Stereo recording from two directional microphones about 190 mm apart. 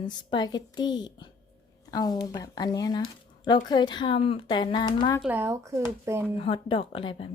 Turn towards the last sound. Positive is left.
turn(degrees=25)  # may be behind; listen again after turning